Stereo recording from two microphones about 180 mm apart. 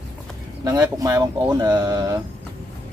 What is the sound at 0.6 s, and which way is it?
Speech, 20° right (ahead or behind).